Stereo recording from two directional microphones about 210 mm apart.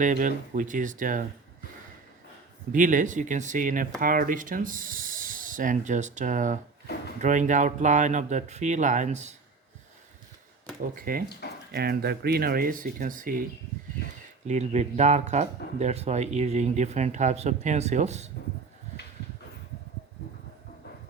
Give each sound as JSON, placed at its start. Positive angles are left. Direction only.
{"t": 0.0, "sound": "speech", "side_deg": -40}
{"t": 2.7, "sound": "speech", "side_deg": -40}
{"t": 10.9, "sound": "speech", "side_deg": -45}
{"t": 11.3, "sound": "speech", "side_deg": 50}
{"t": 11.7, "sound": "speech", "side_deg": -50}
{"t": 14.4, "sound": "speech", "side_deg": -35}